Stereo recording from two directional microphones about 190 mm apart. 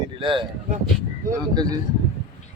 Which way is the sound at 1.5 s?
20° right (ahead or behind).